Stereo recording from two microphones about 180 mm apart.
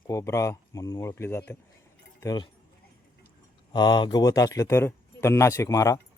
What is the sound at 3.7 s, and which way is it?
Speech, 25° left (ahead or behind).